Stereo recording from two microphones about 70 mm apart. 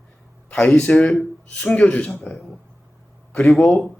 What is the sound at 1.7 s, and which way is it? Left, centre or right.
Speech, centre.